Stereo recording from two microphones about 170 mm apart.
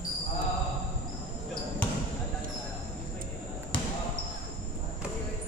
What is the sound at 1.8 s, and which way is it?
Basketball bounce, 10° left (ahead or behind).